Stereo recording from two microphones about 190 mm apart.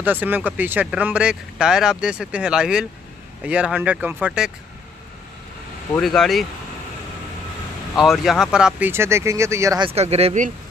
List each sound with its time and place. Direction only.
0.0 s speech: 10° right (ahead or behind)
5.9 s speech: centre (ahead or behind)
8.0 s speech: centre (ahead or behind)
9.8 s speech: 35° right (ahead or behind)